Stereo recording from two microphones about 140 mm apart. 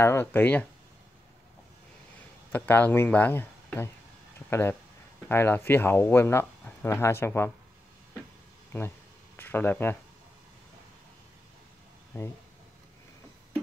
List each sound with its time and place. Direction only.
0.0 s speech: 15° left (ahead or behind)
2.5 s speech: 10° left (ahead or behind)
8.7 s speech: 15° left (ahead or behind)
12.1 s speech: 20° left (ahead or behind)